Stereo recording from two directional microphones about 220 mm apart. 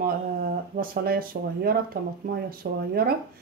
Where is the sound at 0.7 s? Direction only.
40° right (ahead or behind).